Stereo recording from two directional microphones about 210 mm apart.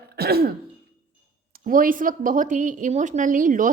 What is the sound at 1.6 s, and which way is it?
A woman's voice, 40° right (ahead or behind).